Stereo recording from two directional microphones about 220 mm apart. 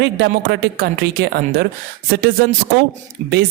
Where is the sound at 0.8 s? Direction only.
45° right (ahead or behind).